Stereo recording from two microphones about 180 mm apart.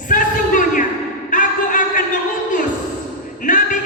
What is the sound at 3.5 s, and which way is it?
Music, 45° left (ahead or behind).